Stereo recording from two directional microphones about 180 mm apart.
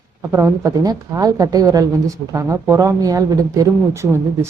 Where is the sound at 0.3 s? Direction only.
15° right (ahead or behind).